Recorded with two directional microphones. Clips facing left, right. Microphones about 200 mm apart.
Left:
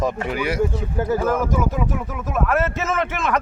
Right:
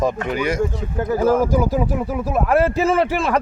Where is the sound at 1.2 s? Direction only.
30° right (ahead or behind).